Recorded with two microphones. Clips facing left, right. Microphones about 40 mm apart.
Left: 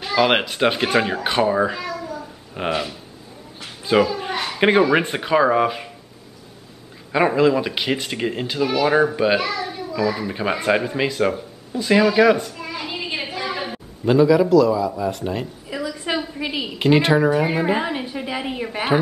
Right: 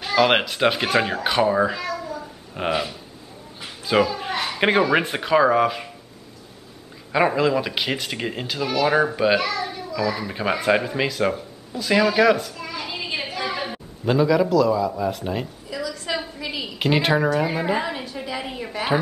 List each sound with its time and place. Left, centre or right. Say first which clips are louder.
0.0 s speech: even; centre
7.1 s speech: left 3 dB; centre
15.7 s a sound: left 2 dB; left
16.3 s a woman's voice: left 4 dB; left
16.7 s a woman's voice: left 4 dB; centre
17.6 s a woman's voice: left 2 dB; centre